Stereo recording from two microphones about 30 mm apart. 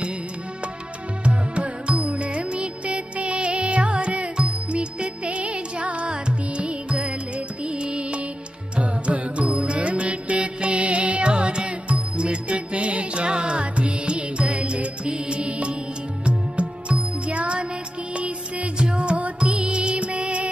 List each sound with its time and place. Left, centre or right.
1.2 s music: right
6.0 s music: right
17.3 s music: right
19.4 s music: right